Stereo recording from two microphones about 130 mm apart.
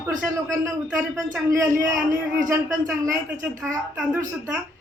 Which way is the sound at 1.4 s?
25° right (ahead or behind).